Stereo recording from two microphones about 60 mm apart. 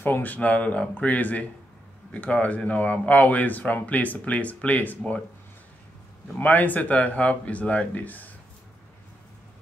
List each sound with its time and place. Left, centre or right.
0.0 s speech: left
6.3 s speech: left